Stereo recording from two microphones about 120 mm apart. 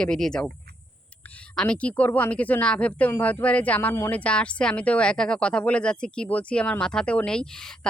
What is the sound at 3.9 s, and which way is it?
Speech, 20° left (ahead or behind).